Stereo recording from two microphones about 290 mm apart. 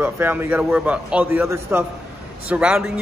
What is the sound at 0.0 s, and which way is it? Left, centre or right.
A man's voice, centre.